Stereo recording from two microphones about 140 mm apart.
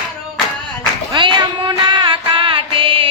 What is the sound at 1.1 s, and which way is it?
Music, 35° right (ahead or behind).